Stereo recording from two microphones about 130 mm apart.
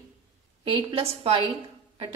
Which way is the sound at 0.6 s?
45° right (ahead or behind).